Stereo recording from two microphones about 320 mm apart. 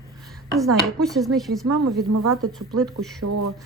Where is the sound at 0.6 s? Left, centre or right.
Centre.